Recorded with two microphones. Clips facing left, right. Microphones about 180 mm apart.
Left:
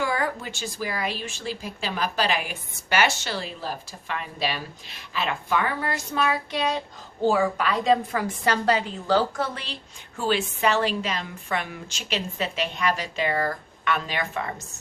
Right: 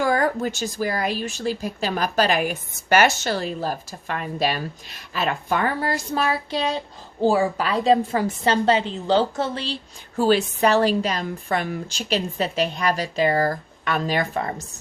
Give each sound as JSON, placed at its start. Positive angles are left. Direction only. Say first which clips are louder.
{"t": 0.0, "sound": "a woman's voice", "louder": "right 6 dB", "side_deg": -45}
{"t": 10.2, "sound": "a woman's voice", "louder": "right 6 dB", "side_deg": -40}